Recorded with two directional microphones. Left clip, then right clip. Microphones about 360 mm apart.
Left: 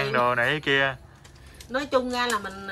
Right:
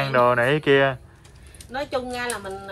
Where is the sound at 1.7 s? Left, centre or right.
Centre.